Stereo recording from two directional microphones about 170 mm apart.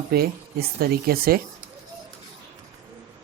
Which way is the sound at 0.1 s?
65° right (ahead or behind).